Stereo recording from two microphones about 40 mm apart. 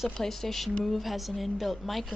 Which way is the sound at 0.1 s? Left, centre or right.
Centre.